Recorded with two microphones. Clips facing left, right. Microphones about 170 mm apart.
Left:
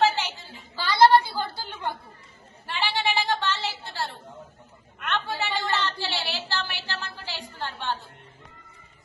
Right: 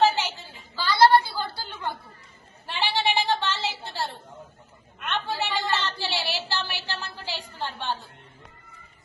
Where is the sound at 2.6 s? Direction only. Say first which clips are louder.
Right 1 dB; 15° right (ahead or behind).